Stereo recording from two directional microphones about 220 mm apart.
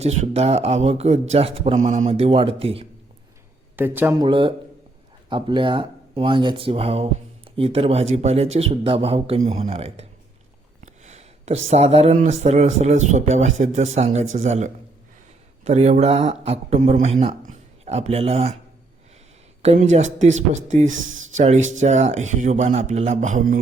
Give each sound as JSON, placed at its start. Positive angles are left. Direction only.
{"t": 0.2, "sound": "speech", "side_deg": -30}
{"t": 3.8, "sound": "speech", "side_deg": -10}
{"t": 4.3, "sound": "speech", "side_deg": -20}
{"t": 11.0, "sound": "a sound", "side_deg": -30}
{"t": 11.7, "sound": "speech", "side_deg": -30}
{"t": 19.6, "sound": "speech", "side_deg": -30}
{"t": 20.8, "sound": "speech", "side_deg": -60}
{"t": 21.3, "sound": "speech", "side_deg": -30}